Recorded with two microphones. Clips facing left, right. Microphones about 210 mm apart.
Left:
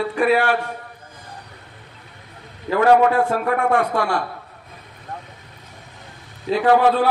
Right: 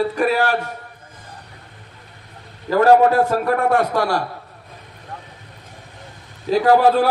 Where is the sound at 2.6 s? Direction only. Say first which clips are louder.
Right 2 dB; 40° right (ahead or behind).